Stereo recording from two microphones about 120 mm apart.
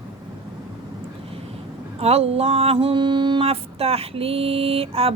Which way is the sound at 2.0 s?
60° right (ahead or behind).